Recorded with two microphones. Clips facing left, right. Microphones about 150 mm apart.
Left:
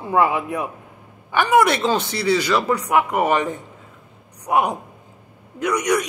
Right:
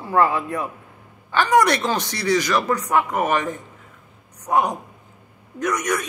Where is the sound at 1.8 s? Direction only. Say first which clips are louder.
Left 3 dB; 25° left (ahead or behind).